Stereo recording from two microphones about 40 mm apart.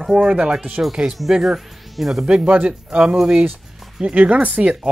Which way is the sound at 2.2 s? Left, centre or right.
Right.